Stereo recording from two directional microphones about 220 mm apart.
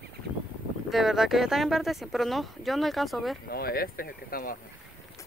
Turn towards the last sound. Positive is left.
turn(degrees=40)  # may be behind; listen again after turning